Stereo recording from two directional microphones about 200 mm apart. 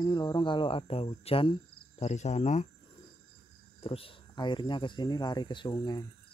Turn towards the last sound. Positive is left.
turn(degrees=20)  # may be behind; listen again after turning